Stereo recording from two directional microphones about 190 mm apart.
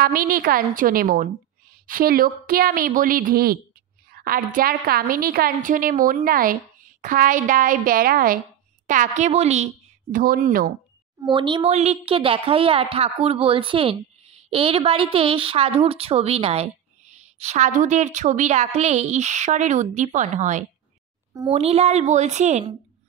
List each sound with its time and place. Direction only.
0.0 s a woman's voice: 50° right (ahead or behind)
10.1 s a woman's voice: 45° right (ahead or behind)
11.1 s speech: 25° right (ahead or behind)